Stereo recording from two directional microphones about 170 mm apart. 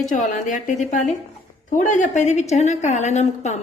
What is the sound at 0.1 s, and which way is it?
A woman's voice, 50° left (ahead or behind).